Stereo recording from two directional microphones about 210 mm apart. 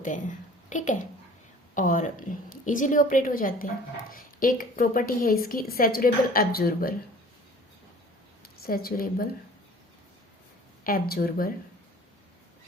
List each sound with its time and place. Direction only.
0.7 s a woman's voice: 35° left (ahead or behind)
8.6 s a woman's voice: 45° left (ahead or behind)
10.8 s a woman's voice: 45° left (ahead or behind)